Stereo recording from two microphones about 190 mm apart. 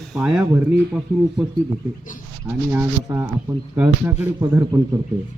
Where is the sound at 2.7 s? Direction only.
10° right (ahead or behind).